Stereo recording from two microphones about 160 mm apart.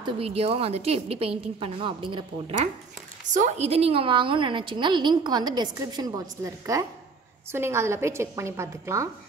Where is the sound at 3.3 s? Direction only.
45° right (ahead or behind); by 9.1 s 20° right (ahead or behind).